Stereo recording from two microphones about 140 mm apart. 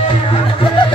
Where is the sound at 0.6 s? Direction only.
40° left (ahead or behind).